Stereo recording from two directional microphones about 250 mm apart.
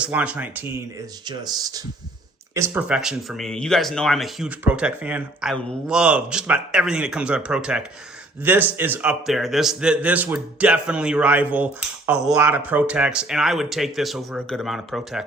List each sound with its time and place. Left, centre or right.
0.0 s a man's voice: centre